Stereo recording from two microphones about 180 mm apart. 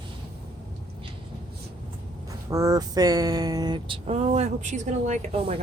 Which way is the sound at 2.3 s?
20° right (ahead or behind).